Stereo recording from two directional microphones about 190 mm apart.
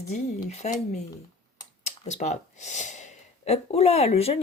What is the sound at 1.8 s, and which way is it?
Speech, 35° left (ahead or behind).